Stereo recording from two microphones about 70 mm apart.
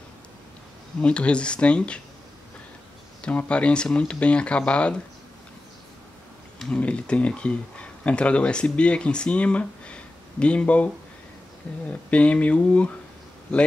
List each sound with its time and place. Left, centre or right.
1.0 s speech: centre
3.2 s speech: centre
6.8 s speech: centre
12.1 s speech: centre